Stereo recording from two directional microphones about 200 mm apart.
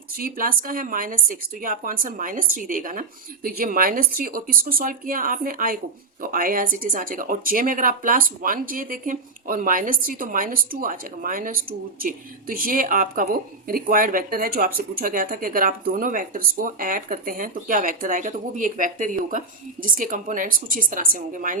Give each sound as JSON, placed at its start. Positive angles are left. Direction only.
{"t": 0.2, "sound": "a woman's voice", "side_deg": -45}